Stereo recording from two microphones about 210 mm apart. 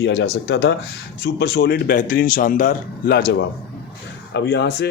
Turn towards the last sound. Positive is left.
turn(degrees=55)  # may be behind; listen again after turning